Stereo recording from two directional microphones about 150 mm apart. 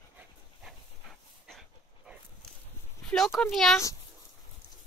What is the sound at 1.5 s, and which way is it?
Dog, centre (ahead or behind).